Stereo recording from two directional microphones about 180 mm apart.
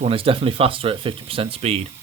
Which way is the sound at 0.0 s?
30° right (ahead or behind).